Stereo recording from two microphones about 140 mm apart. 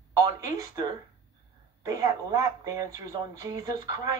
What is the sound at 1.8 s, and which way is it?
Speech, 25° right (ahead or behind).